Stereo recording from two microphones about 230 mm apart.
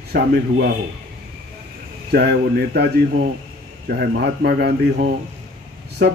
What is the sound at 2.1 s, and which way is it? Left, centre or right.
Speech, right.